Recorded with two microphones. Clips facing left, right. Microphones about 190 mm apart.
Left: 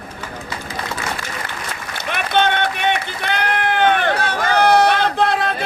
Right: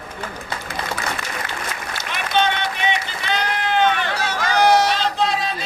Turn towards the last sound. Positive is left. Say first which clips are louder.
# left 4 dB
turn(degrees=55)  # may be behind; listen again after turning